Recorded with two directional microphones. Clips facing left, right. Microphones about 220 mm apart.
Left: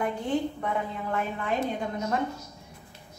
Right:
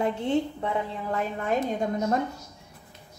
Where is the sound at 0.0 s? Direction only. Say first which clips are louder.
Right 2 dB; 25° right (ahead or behind).